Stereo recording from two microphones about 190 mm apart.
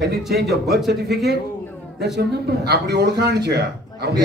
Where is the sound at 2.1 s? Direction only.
60° right (ahead or behind).